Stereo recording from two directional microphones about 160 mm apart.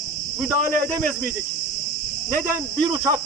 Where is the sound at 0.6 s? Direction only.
55° right (ahead or behind).